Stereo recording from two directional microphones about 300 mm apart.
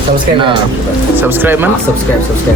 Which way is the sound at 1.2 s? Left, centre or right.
Centre.